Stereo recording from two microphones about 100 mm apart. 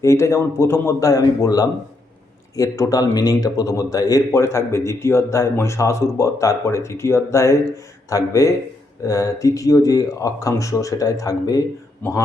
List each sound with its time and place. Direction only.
0.0 s a man's voice: 30° left (ahead or behind)